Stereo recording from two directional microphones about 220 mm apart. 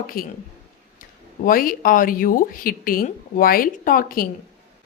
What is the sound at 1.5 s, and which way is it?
A woman's voice, 40° left (ahead or behind).